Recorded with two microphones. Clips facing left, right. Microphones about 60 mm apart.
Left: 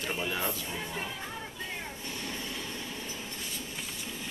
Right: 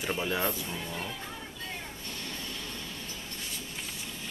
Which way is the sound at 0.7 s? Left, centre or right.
Centre.